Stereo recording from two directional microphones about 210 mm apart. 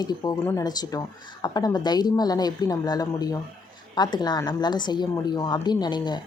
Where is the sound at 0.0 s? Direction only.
20° left (ahead or behind).